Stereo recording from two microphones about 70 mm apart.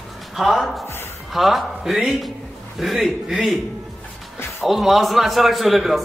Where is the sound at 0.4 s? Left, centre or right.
Centre.